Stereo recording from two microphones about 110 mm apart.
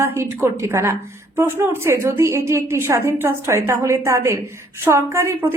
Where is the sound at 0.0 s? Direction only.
25° right (ahead or behind).